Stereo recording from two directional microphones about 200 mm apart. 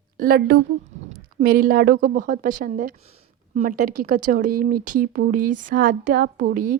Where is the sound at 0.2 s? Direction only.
50° right (ahead or behind).